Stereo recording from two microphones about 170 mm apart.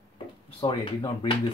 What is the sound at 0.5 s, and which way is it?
Speech, 30° left (ahead or behind).